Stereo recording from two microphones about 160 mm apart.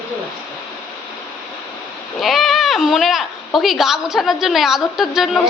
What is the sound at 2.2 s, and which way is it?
Speech, centre (ahead or behind).